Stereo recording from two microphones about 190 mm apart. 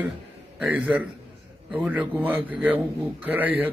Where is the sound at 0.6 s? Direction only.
5° right (ahead or behind).